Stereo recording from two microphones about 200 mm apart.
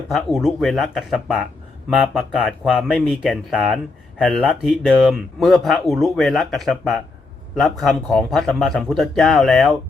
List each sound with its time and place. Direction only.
0.1 s speech: centre (ahead or behind)